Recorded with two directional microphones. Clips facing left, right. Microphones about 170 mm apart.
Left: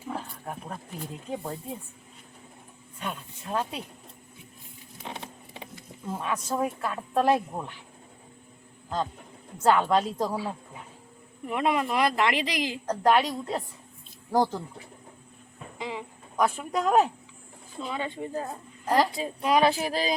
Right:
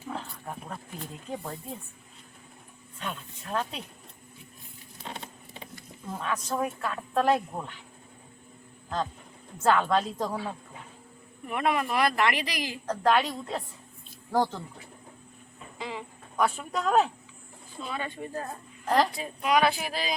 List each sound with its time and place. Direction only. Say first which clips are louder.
0.1 s speech: left 2 dB; 10° left (ahead or behind)
3.0 s speech: left 2 dB; 10° left (ahead or behind)
5.0 s a sound: left 1 dB; 15° left (ahead or behind)
6.1 s speech: left 1 dB; 10° left (ahead or behind)
9.6 s a woman's voice: left 2 dB; 15° left (ahead or behind)
13.0 s speech: left 2 dB; 10° left (ahead or behind)
14.3 s speech: left 2 dB; 10° left (ahead or behind)
15.8 s speech: left 2 dB; 20° left (ahead or behind)
16.4 s a woman's voice: left 2 dB; 5° left (ahead or behind)
19.1 s speech: left 1 dB; 30° left (ahead or behind)